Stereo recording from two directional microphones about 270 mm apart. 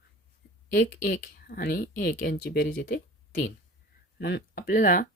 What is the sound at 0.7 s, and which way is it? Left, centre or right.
Speech, left.